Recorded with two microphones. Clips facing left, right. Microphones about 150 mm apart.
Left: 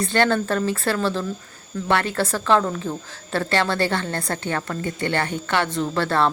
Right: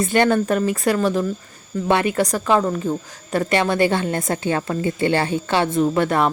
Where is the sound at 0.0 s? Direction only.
20° right (ahead or behind).